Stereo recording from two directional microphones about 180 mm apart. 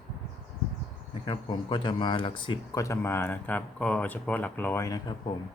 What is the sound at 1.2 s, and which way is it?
Speech, 25° left (ahead or behind).